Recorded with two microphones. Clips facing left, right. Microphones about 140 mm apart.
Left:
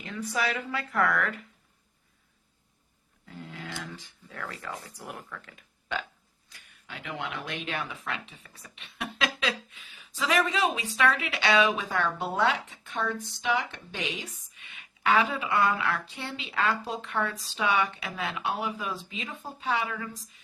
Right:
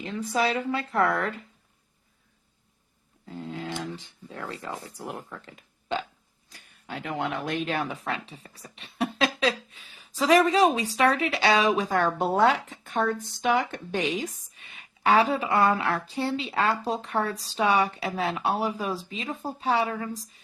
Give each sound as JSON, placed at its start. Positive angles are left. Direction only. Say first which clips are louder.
{"t": 0.0, "sound": "a woman's voice", "louder": "right 4 dB", "side_deg": -30}
{"t": 3.2, "sound": "speech", "louder": "right 7 dB", "side_deg": -30}
{"t": 6.5, "sound": "speech", "louder": "right 8 dB", "side_deg": -40}